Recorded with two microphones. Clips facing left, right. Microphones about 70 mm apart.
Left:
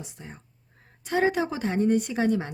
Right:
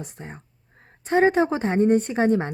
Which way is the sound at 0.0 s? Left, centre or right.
Right.